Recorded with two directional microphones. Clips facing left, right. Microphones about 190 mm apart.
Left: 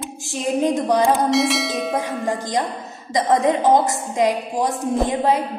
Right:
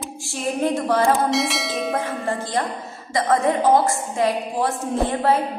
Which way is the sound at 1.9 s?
15° left (ahead or behind).